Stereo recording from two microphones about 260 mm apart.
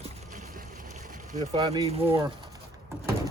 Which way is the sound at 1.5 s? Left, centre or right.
Centre.